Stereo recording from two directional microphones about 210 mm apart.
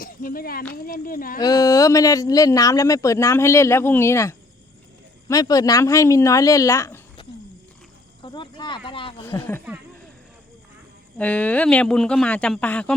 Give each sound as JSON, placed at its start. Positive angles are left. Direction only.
{"t": 0.0, "sound": "speech", "side_deg": 40}
{"t": 1.4, "sound": "speech", "side_deg": 15}
{"t": 9.2, "sound": "speech", "side_deg": 10}
{"t": 11.2, "sound": "speech", "side_deg": 5}